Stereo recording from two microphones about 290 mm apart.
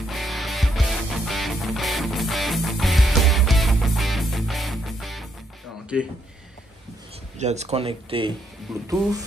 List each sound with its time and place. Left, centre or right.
0.0 s music: centre
7.3 s speech: right
8.7 s speech: centre